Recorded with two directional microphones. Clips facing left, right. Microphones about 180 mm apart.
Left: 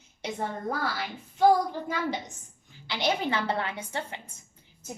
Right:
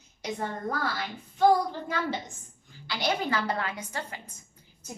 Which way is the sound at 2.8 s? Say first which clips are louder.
Left 1 dB; 20° left (ahead or behind).